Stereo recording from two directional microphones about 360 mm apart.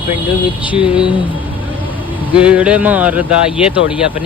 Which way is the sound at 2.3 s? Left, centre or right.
Centre.